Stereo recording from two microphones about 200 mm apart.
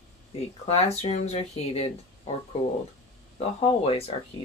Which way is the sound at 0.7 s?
30° left (ahead or behind).